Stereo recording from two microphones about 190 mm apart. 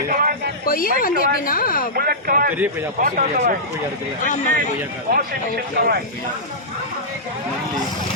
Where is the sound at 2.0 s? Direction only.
50° right (ahead or behind).